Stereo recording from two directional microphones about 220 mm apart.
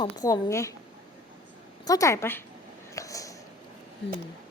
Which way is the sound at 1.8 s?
15° left (ahead or behind).